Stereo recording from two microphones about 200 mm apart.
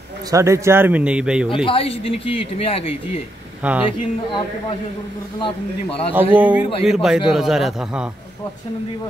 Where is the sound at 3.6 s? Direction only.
5° right (ahead or behind).